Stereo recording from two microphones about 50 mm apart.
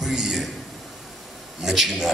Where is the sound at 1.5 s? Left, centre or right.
Centre.